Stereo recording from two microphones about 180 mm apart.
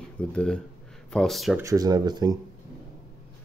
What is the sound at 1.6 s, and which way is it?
Speech, 20° right (ahead or behind).